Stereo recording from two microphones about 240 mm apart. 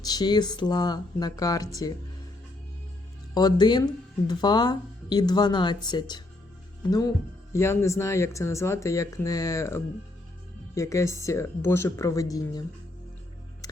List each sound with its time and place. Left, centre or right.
0.0 s speech: centre
3.3 s speech: centre